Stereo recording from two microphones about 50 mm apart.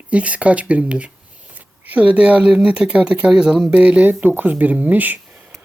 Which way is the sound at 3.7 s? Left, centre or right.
Right.